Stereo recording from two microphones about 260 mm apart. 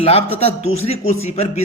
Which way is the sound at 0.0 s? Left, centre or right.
Left.